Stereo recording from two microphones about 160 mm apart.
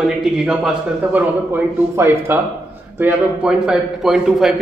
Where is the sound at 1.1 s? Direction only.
15° right (ahead or behind).